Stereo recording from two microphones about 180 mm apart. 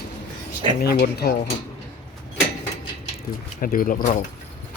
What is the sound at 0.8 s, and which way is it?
Speech, 60° left (ahead or behind).